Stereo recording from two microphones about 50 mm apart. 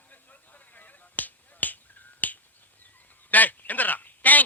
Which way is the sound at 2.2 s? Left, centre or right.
Left.